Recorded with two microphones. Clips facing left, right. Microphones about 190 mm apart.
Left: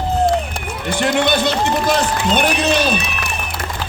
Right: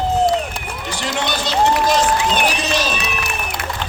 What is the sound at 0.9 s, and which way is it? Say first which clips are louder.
A man's voice: left 7 dB; 55° left (ahead or behind).